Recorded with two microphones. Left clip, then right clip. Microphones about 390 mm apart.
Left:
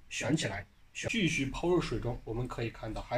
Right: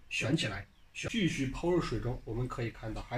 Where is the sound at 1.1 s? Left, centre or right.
Left.